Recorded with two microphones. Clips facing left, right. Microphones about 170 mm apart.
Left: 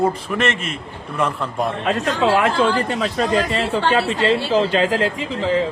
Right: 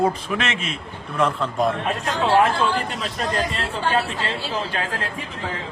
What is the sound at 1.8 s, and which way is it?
Speech, 90° left.